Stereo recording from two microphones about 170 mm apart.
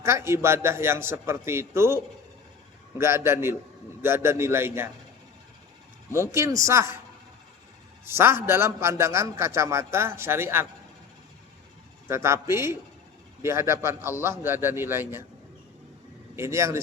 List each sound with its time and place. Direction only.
0.0 s a man's voice: 15° right (ahead or behind)
3.0 s a man's voice: 15° right (ahead or behind)
6.1 s a man's voice: 15° right (ahead or behind)
8.0 s a man's voice: 15° right (ahead or behind)
12.0 s a man's voice: 15° right (ahead or behind)
16.3 s a man's voice: 15° right (ahead or behind)